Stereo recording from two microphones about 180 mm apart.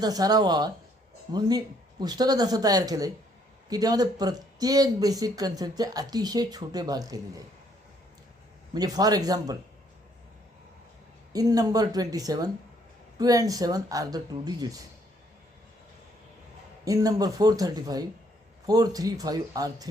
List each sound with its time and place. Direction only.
0.0 s speech: 20° right (ahead or behind)
8.7 s speech: 20° right (ahead or behind)
11.3 s speech: 20° right (ahead or behind)
16.8 s speech: 20° right (ahead or behind)